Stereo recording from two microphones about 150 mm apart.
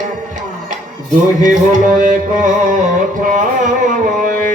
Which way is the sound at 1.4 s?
55° right (ahead or behind).